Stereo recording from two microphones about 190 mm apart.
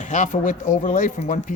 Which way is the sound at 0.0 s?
40° left (ahead or behind).